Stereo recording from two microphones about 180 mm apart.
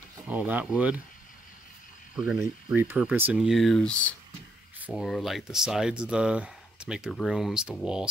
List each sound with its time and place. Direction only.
0.3 s speech: 10° right (ahead or behind)
2.1 s speech: 5° right (ahead or behind)
4.7 s speech: 5° right (ahead or behind)